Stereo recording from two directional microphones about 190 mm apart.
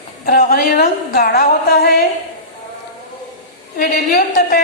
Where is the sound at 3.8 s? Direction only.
50° left (ahead or behind).